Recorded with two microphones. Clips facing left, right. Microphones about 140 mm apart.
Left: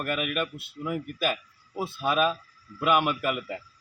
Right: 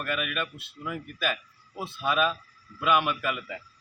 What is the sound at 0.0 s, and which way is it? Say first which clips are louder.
Speech: left 2 dB; 40° left (ahead or behind).